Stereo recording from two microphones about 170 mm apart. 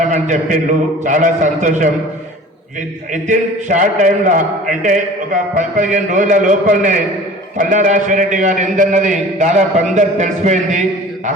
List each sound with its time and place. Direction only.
0.1 s a man's voice: 50° right (ahead or behind)
3.2 s a man's voice: 50° right (ahead or behind)